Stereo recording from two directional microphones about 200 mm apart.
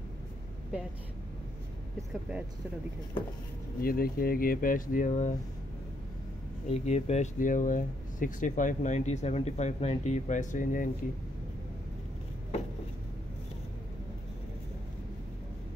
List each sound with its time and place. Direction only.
2.0 s speech: 5° right (ahead or behind)
3.8 s speech: 50° left (ahead or behind)
6.7 s speech: 35° left (ahead or behind)